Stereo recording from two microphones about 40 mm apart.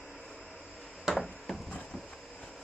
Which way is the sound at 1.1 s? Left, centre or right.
Centre.